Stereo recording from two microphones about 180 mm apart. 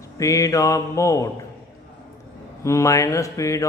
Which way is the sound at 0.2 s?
15° left (ahead or behind).